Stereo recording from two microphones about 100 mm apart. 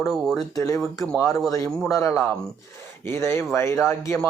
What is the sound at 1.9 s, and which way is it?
A man's voice, 30° left (ahead or behind).